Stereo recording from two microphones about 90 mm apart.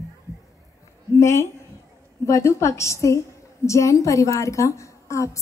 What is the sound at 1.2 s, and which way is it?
A woman's voice, 30° left (ahead or behind).